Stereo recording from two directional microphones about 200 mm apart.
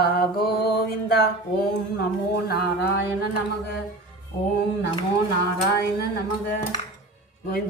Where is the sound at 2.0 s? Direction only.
55° left (ahead or behind).